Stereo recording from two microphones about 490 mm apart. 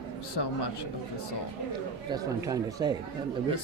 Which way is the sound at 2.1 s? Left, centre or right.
Centre.